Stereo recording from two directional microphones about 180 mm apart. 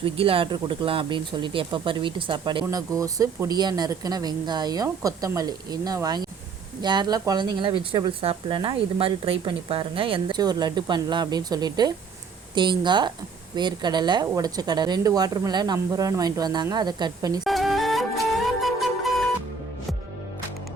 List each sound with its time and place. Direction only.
0.0 s speech: 30° right (ahead or behind)
17.4 s music: centre (ahead or behind)